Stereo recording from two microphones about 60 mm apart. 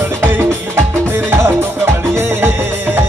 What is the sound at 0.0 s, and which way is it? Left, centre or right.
Music, right.